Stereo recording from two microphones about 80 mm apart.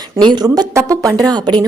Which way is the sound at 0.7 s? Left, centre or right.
Right.